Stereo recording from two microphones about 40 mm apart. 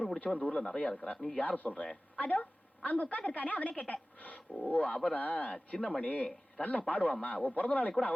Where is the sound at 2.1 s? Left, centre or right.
Left.